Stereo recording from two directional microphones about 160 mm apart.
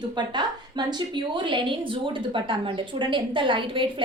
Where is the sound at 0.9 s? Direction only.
30° right (ahead or behind).